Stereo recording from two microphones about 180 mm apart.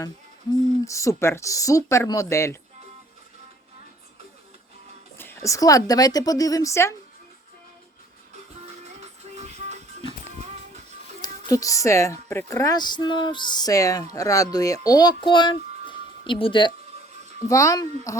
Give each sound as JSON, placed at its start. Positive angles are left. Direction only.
{"t": 0.5, "sound": "speech", "side_deg": 15}
{"t": 5.1, "sound": "speech", "side_deg": 10}
{"t": 8.6, "sound": "music", "side_deg": -40}
{"t": 11.2, "sound": "speech", "side_deg": 20}